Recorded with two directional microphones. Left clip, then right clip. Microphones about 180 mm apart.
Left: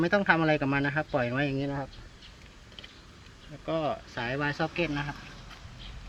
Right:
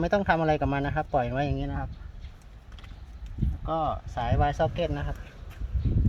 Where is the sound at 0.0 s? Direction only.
55° right (ahead or behind).